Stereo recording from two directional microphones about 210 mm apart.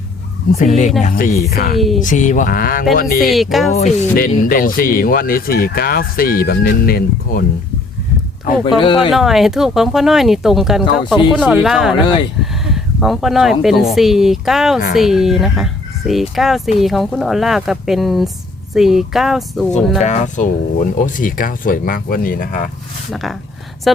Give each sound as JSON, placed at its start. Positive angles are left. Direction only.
{"t": 0.6, "sound": "speech", "side_deg": 35}
{"t": 3.2, "sound": "speech", "side_deg": 0}
{"t": 4.1, "sound": "speech", "side_deg": 45}
{"t": 8.8, "sound": "speech", "side_deg": 25}
{"t": 9.0, "sound": "speech", "side_deg": 0}
{"t": 20.0, "sound": "speech", "side_deg": 35}
{"t": 23.1, "sound": "speech", "side_deg": 0}